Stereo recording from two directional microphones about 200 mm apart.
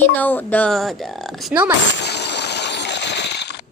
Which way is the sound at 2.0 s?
55° left (ahead or behind).